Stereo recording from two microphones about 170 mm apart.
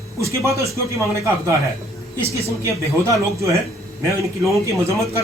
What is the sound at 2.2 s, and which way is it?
Speech, 15° right (ahead or behind).